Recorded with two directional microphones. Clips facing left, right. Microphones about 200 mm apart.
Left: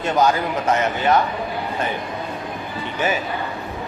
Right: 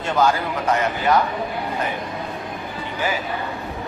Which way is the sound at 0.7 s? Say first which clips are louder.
Left 1 dB; 25° left (ahead or behind).